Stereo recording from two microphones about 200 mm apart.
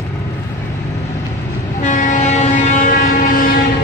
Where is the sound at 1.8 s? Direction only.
40° left (ahead or behind).